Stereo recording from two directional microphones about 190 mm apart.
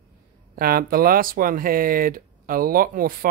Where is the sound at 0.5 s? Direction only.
50° right (ahead or behind).